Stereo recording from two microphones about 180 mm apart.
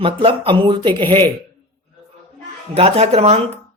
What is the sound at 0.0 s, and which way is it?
Speech, 30° right (ahead or behind).